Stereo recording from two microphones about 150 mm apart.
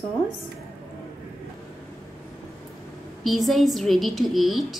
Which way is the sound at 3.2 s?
Centre (ahead or behind).